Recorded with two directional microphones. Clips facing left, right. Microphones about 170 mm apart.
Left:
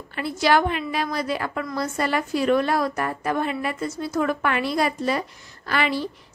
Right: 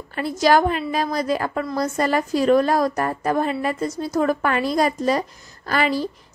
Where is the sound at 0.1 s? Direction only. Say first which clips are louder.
Right 3 dB; 40° right (ahead or behind).